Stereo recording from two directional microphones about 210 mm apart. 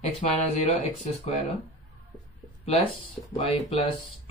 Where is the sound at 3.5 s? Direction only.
30° left (ahead or behind).